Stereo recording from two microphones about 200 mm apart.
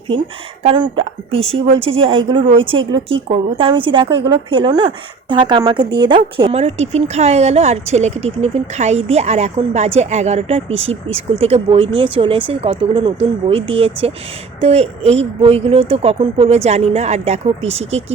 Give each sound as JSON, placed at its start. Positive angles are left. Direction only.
{"t": 0.6, "sound": "a woman's voice", "side_deg": -25}